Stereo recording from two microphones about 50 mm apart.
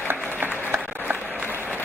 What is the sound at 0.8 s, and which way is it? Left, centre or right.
Applause, left.